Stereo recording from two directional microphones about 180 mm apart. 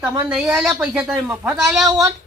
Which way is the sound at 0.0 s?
15° right (ahead or behind).